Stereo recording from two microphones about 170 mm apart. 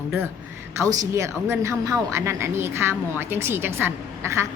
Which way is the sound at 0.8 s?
20° right (ahead or behind).